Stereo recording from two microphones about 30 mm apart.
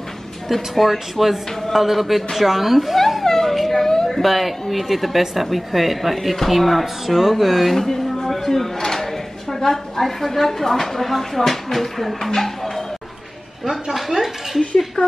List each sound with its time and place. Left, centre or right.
0.5 s speech: centre
3.4 s a sound: centre
3.8 s a sound: centre
4.2 s speech: centre
7.7 s a woman's voice: centre
12.4 s music: centre
13.9 s speech: centre
15.0 s speech: left